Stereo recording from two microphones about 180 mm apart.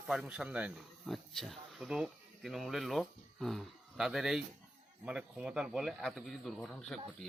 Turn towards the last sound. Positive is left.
turn(degrees=0)  # may be behind; listen again after turning